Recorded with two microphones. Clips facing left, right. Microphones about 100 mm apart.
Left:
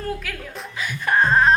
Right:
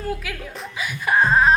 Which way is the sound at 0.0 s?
10° right (ahead or behind).